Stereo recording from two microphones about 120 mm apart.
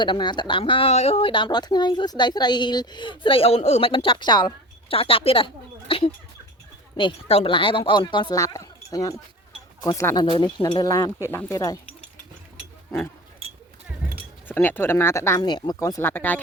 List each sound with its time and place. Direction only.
0.0 s speech: 40° left (ahead or behind)
4.9 s speech: 50° left (ahead or behind)
6.9 s speech: 50° left (ahead or behind)
8.4 s speech: 30° left (ahead or behind)
10.2 s speech: 40° left (ahead or behind); by 11.5 s 20° left (ahead or behind)
11.5 s speech: 30° left (ahead or behind)
14.4 s speech: 15° left (ahead or behind)
15.4 s speech: 35° left (ahead or behind); by 16.4 s 15° left (ahead or behind)